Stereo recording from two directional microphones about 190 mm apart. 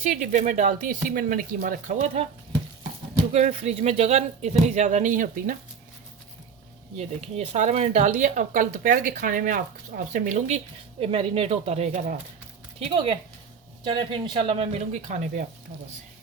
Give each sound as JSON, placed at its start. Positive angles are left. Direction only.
{"t": 0.0, "sound": "speech", "side_deg": -40}
{"t": 3.3, "sound": "speech", "side_deg": -35}
{"t": 6.9, "sound": "speech", "side_deg": -35}
{"t": 12.8, "sound": "speech", "side_deg": -30}